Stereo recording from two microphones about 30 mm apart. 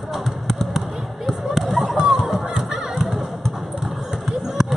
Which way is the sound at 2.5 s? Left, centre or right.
Centre.